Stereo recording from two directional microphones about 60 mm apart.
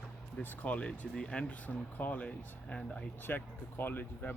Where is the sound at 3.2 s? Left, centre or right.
Left.